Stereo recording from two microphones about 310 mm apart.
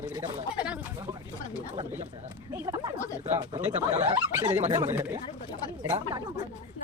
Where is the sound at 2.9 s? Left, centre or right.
Centre.